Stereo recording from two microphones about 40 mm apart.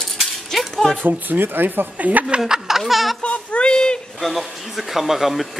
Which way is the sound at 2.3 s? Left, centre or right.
Centre.